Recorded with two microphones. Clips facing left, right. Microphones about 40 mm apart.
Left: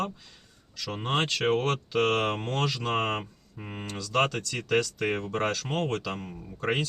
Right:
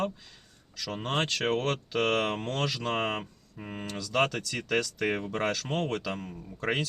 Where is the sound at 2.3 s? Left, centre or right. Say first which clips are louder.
Left 2 dB; left.